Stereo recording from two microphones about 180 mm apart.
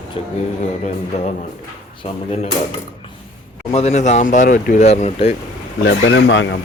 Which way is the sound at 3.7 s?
35° left (ahead or behind).